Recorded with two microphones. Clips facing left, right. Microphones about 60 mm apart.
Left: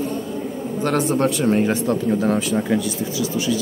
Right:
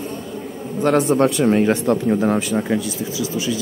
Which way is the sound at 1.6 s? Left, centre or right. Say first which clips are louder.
Right 3 dB; right.